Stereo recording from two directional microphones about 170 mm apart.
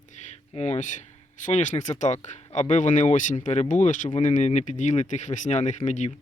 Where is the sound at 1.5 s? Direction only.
45° left (ahead or behind).